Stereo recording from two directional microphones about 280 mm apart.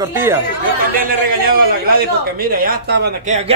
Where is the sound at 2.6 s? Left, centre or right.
Right.